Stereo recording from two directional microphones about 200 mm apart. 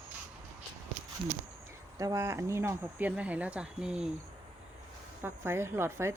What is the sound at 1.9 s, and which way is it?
Speech, 15° right (ahead or behind).